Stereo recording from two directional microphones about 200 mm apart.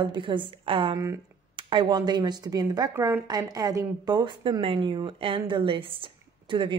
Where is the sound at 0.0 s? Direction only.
25° right (ahead or behind).